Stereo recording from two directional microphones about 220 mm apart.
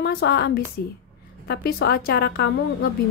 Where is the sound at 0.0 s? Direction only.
50° left (ahead or behind).